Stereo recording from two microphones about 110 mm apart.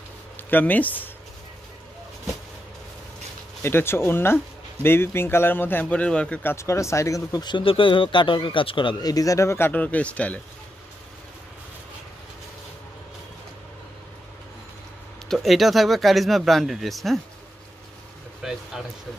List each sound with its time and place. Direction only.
0.4 s speech: 15° left (ahead or behind)
3.6 s a man's voice: 20° left (ahead or behind)
6.5 s a man's voice: 25° left (ahead or behind)
7.4 s speech: 50° left (ahead or behind)
9.1 s speech: 30° left (ahead or behind); by 10.4 s 10° left (ahead or behind)
15.2 s speech: centre (ahead or behind)
18.4 s speech: 5° right (ahead or behind)